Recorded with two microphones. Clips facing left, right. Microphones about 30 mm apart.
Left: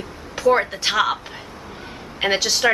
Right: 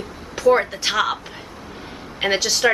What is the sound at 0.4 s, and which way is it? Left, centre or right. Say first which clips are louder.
Speech: right 1 dB; centre.